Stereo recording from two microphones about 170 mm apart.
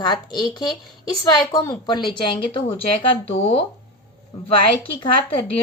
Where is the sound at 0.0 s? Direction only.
25° left (ahead or behind).